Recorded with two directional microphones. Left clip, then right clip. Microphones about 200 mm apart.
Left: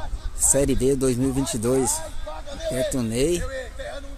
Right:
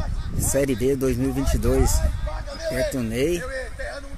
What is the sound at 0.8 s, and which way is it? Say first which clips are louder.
Speech: left 1 dB; 15° left (ahead or behind).